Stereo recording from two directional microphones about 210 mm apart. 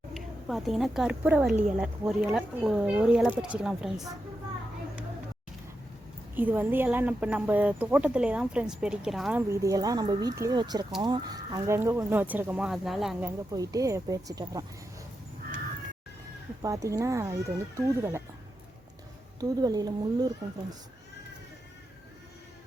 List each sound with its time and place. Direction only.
0.1 s a woman's voice: centre (ahead or behind)
6.3 s speech: 10° right (ahead or behind)
9.5 s speech: 15° right (ahead or behind)
13.5 s speech: 15° right (ahead or behind)
16.6 s speech: 15° right (ahead or behind)
19.4 s a woman's voice: 20° right (ahead or behind)